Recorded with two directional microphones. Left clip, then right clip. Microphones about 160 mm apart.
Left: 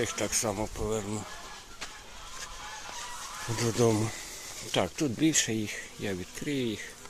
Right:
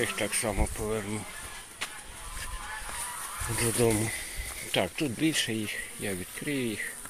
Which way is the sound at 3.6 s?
20° left (ahead or behind).